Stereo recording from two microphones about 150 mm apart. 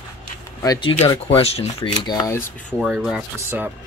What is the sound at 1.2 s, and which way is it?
Speech, 40° left (ahead or behind).